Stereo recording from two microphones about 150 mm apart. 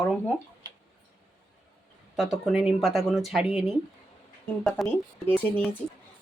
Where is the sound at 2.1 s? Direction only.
5° right (ahead or behind).